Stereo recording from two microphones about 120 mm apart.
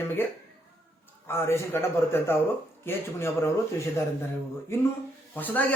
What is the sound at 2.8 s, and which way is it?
Speech, 20° left (ahead or behind).